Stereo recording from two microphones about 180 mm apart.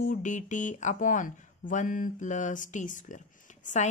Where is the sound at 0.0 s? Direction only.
45° left (ahead or behind).